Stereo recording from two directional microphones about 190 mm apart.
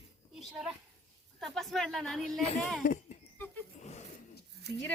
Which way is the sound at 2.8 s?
45° left (ahead or behind).